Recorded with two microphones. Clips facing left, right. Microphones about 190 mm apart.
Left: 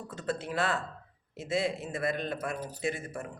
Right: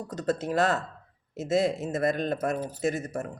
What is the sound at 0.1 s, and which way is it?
Speech, 40° right (ahead or behind).